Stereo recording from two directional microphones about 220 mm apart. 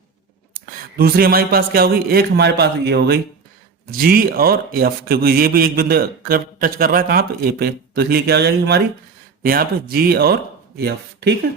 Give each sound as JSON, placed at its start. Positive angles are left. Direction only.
{"t": 0.5, "sound": "a man's voice", "side_deg": -40}